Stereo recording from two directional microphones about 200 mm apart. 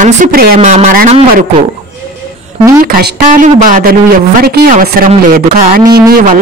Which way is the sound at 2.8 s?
45° right (ahead or behind).